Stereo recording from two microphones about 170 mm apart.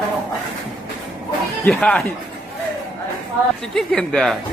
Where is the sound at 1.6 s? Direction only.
5° left (ahead or behind).